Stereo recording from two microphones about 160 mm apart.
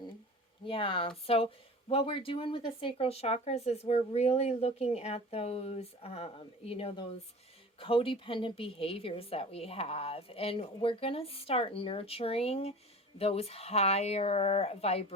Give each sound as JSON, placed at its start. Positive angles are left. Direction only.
{"t": 0.6, "sound": "speech", "side_deg": 30}